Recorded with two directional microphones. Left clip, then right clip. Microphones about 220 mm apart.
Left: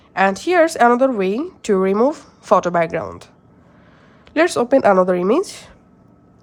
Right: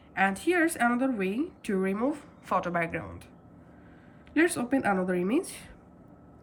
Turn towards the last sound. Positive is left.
turn(degrees=20)  # may be behind; listen again after turning